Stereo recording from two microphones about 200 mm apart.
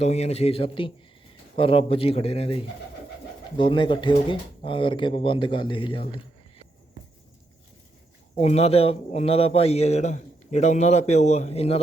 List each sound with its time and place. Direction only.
0.0 s a man's voice: 30° left (ahead or behind)
8.4 s a man's voice: 30° left (ahead or behind)